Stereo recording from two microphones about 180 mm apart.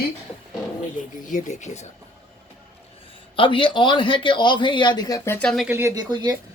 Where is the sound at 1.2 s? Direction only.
45° left (ahead or behind).